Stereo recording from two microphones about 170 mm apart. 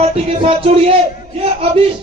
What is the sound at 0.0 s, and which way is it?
A man's voice, 35° right (ahead or behind).